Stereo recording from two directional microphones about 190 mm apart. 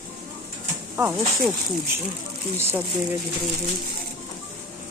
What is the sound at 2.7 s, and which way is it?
Speech, 10° right (ahead or behind).